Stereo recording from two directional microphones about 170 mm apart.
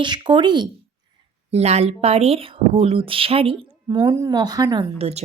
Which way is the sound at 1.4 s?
40° right (ahead or behind).